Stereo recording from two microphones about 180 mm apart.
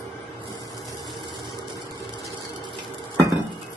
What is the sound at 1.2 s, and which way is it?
Vehicle, 25° right (ahead or behind).